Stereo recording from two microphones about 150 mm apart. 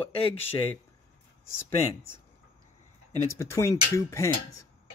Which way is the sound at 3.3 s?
20° left (ahead or behind).